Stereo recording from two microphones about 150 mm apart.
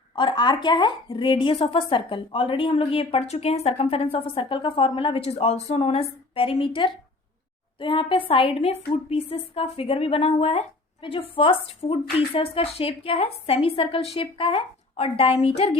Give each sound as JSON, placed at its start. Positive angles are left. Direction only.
{"t": 0.2, "sound": "speech", "side_deg": 30}